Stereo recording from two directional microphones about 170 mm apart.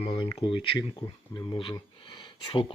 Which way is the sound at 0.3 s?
30° left (ahead or behind).